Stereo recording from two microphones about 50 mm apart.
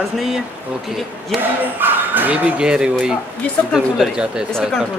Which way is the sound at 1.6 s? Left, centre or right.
Right.